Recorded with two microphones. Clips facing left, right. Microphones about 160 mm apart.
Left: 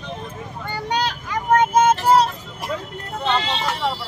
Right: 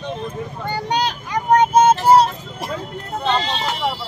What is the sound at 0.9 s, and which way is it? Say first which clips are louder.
Vehicle: right 1 dB; 20° right (ahead or behind).